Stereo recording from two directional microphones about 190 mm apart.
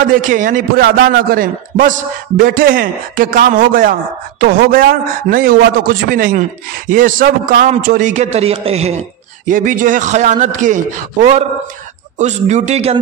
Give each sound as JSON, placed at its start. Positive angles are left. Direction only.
{"t": 0.0, "sound": "a man's voice", "side_deg": -45}
{"t": 9.5, "sound": "a man's voice", "side_deg": -45}
{"t": 12.2, "sound": "a man's voice", "side_deg": -40}